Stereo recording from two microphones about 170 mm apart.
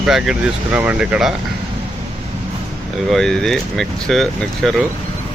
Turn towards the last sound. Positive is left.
turn(degrees=0)  # may be behind; listen again after turning